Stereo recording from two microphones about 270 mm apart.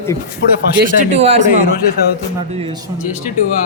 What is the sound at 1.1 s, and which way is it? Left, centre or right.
Speech, right.